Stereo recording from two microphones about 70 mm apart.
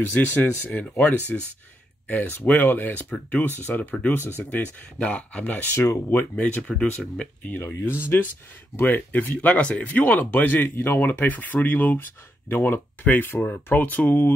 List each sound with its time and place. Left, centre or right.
0.0 s speech: left
7.4 s speech: left